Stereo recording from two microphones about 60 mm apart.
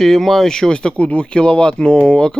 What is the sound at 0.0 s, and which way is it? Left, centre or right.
A man's voice, centre.